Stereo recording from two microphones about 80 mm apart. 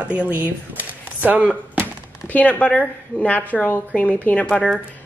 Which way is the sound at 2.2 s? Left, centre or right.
Centre.